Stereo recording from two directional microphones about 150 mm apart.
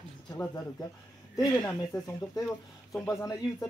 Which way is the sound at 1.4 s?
25° left (ahead or behind).